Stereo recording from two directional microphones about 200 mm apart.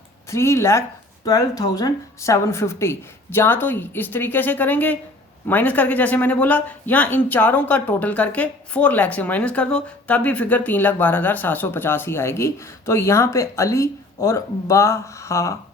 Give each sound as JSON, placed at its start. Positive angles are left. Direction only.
{"t": 0.3, "sound": "speech", "side_deg": 15}